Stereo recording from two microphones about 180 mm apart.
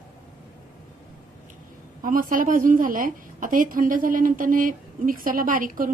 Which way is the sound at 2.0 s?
50° right (ahead or behind).